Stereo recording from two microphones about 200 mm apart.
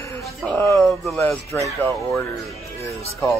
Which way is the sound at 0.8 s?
Centre (ahead or behind).